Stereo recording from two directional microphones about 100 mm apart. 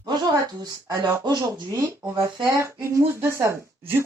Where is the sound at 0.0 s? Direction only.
40° right (ahead or behind).